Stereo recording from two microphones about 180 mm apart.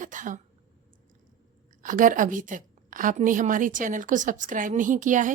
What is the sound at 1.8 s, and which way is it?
A woman's voice, 45° right (ahead or behind).